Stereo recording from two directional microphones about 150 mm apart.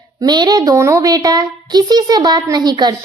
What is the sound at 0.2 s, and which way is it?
A child's voice, 30° right (ahead or behind).